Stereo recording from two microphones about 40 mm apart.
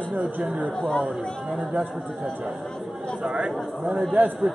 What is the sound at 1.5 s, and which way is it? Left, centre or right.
Speech, right.